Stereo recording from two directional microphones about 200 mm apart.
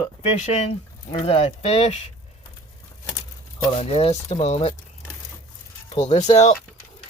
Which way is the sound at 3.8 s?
30° left (ahead or behind).